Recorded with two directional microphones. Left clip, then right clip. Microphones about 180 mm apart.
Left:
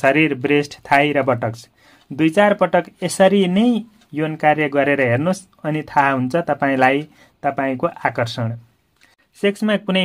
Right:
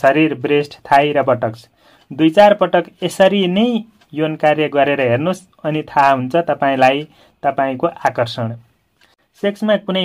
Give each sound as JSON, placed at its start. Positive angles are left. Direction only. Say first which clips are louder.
{"t": 0.0, "sound": "speech", "louder": "right 2 dB", "side_deg": 30}